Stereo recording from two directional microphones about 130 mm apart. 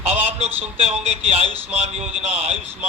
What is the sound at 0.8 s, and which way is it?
A man's voice, 55° right (ahead or behind).